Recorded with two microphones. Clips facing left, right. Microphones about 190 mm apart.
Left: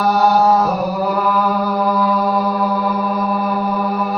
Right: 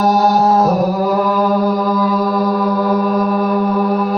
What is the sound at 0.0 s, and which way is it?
Chant, 40° right (ahead or behind).